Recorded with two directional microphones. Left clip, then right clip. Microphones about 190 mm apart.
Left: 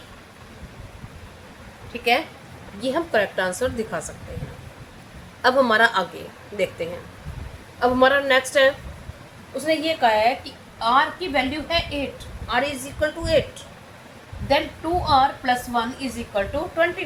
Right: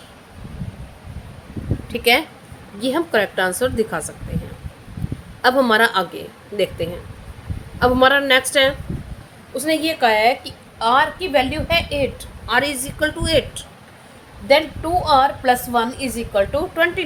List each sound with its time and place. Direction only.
1.9 s speech: 50° right (ahead or behind)
2.8 s a woman's voice: 30° right (ahead or behind)
5.4 s a woman's voice: 30° right (ahead or behind)
9.6 s a woman's voice: 55° right (ahead or behind)
15.0 s a woman's voice: 65° right (ahead or behind)